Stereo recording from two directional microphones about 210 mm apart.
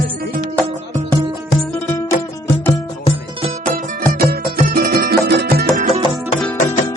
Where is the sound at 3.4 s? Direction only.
40° right (ahead or behind).